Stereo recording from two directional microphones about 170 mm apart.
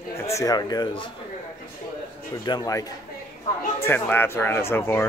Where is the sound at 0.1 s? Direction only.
20° left (ahead or behind).